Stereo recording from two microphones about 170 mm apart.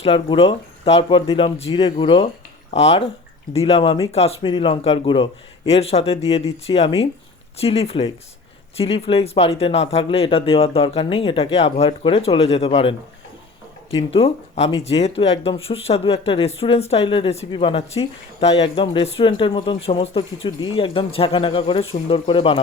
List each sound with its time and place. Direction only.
0.0 s speech: 35° left (ahead or behind)